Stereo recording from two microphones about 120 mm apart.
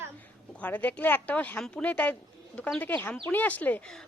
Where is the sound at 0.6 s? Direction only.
15° left (ahead or behind).